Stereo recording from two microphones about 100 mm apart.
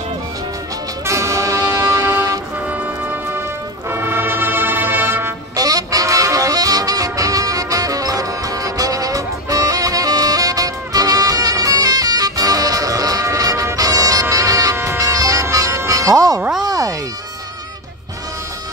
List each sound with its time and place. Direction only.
1.0 s music: 30° right (ahead or behind)
3.9 s brass instrument: 20° right (ahead or behind)
5.6 s saxophone: 40° right (ahead or behind)
14.3 s music: 35° right (ahead or behind)